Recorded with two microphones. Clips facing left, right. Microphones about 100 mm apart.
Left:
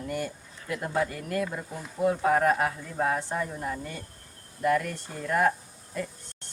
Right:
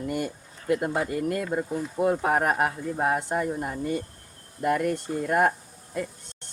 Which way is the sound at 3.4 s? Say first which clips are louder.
Right 4 dB; 30° right (ahead or behind).